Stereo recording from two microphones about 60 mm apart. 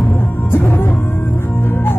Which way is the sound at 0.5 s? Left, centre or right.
Left.